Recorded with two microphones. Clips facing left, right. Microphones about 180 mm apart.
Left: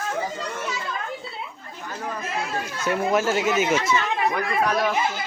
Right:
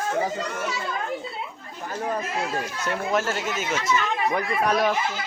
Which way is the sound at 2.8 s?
5° left (ahead or behind).